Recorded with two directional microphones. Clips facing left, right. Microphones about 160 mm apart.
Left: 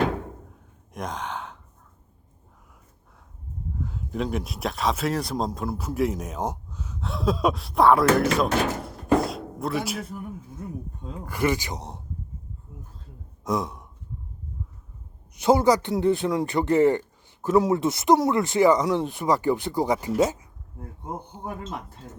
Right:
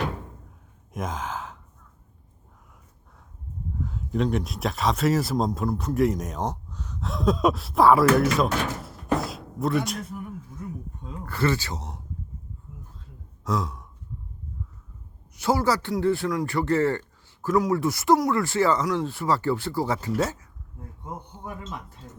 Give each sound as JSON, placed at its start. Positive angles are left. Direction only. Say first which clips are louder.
{"t": 0.9, "sound": "gasp", "louder": "right 1 dB", "side_deg": 0}
{"t": 3.8, "sound": "speech", "louder": "right 3 dB", "side_deg": 0}
{"t": 8.2, "sound": "slam", "louder": "left 1 dB", "side_deg": 0}
{"t": 11.3, "sound": "speech", "louder": "even", "side_deg": 15}
{"t": 13.4, "sound": "sigh", "louder": "left 1 dB", "side_deg": 20}
{"t": 15.4, "sound": "speech", "louder": "left 4 dB", "side_deg": 20}